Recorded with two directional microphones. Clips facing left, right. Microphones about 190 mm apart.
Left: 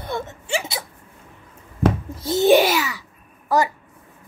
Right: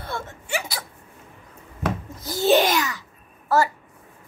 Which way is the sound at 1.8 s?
25° left (ahead or behind).